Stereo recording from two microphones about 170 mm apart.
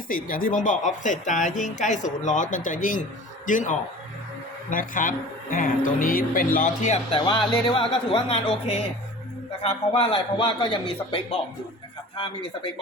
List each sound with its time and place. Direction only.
0.1 s speech: 55° left (ahead or behind)
7.2 s a man's voice: 25° left (ahead or behind)